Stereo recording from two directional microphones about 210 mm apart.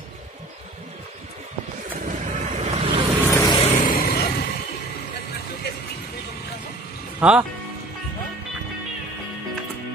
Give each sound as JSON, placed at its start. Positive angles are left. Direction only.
{"t": 2.0, "sound": "vehicle", "side_deg": -35}
{"t": 3.3, "sound": "vehicle", "side_deg": 15}
{"t": 3.6, "sound": "vehicle", "side_deg": 40}
{"t": 7.2, "sound": "speech", "side_deg": -5}